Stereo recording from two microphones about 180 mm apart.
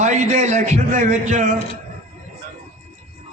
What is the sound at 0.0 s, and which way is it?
A man's voice, 40° right (ahead or behind).